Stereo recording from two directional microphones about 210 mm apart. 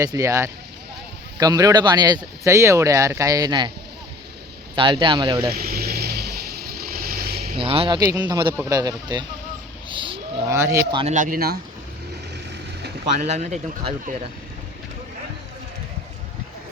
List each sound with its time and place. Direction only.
0.0 s speech: 15° right (ahead or behind)
4.7 s speech: 25° right (ahead or behind)
5.5 s vehicle: 45° right (ahead or behind)
7.6 s speech: 25° right (ahead or behind)
9.9 s livestock: 25° right (ahead or behind)
10.5 s speech: 15° right (ahead or behind)
11.0 s speech: 35° right (ahead or behind)
13.2 s speech: 35° right (ahead or behind)